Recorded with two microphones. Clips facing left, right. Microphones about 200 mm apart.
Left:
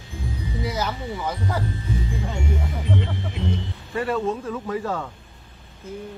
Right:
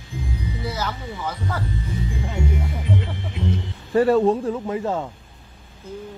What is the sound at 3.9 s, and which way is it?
Speech, 35° right (ahead or behind).